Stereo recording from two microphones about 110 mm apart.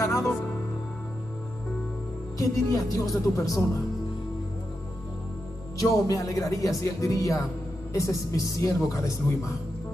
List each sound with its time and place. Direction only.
0.0 s music: 30° left (ahead or behind)
2.3 s speech: 30° left (ahead or behind)
5.8 s speech: 30° left (ahead or behind)